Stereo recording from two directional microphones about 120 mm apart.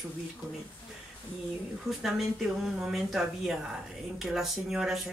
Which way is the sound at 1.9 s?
5° right (ahead or behind).